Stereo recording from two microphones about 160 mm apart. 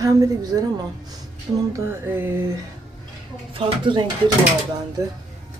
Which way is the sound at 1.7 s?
15° right (ahead or behind).